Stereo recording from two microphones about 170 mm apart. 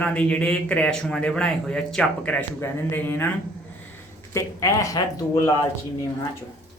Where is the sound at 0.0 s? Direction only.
5° left (ahead or behind).